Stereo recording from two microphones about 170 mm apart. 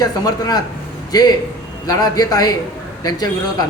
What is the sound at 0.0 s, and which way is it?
A man's voice, 25° left (ahead or behind).